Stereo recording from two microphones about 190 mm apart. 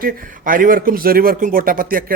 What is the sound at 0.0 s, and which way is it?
Speech, 45° right (ahead or behind).